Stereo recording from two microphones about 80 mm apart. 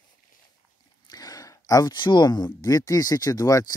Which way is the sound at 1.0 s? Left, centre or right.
Left.